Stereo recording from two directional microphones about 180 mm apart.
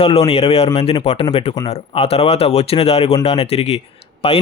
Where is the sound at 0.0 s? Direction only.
35° left (ahead or behind).